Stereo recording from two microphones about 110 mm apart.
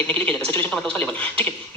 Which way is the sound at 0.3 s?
15° left (ahead or behind).